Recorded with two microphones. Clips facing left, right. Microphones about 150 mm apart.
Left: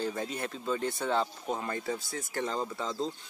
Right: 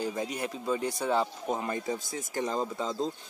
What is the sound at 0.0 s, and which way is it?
Speech, 10° right (ahead or behind).